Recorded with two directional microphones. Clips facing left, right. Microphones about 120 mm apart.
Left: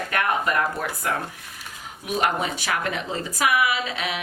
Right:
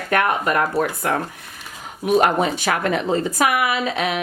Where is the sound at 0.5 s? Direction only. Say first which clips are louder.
Right 5 dB; 50° right (ahead or behind).